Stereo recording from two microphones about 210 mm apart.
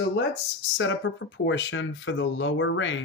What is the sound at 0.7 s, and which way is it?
Speech, 65° left (ahead or behind).